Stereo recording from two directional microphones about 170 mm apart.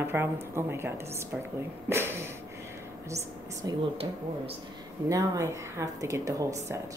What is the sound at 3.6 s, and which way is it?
Speech, 30° right (ahead or behind).